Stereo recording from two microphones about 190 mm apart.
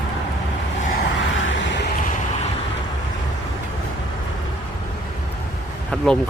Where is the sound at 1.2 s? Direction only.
85° left.